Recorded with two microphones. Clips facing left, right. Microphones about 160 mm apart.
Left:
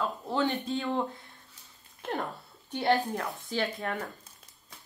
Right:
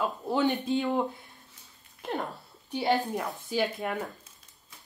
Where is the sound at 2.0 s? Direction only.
Centre (ahead or behind).